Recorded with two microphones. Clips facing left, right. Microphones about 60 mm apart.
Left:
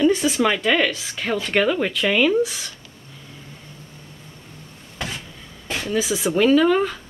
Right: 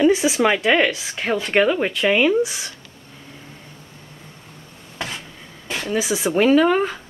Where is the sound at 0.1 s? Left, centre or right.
Centre.